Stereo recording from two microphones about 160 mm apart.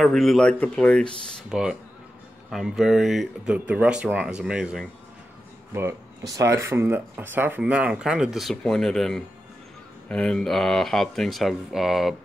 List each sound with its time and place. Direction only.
0.0 s speech: centre (ahead or behind)
1.3 s speech: 5° right (ahead or behind)
5.8 s speech: 20° right (ahead or behind); by 12.2 s centre (ahead or behind)